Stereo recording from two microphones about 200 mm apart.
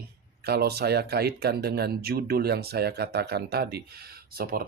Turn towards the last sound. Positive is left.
turn(degrees=-45)  # may be behind; listen again after turning